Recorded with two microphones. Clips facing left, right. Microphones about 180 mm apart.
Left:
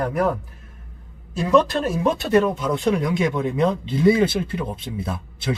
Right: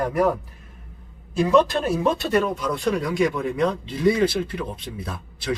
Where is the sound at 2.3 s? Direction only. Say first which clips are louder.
Left 3 dB; 20° left (ahead or behind).